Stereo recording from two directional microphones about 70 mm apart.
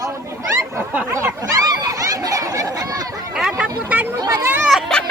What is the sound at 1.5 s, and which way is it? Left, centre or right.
Speech, right.